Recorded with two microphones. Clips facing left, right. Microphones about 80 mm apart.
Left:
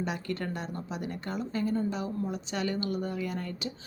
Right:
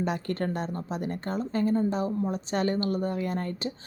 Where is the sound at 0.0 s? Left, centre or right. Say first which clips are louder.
Right 4 dB; right.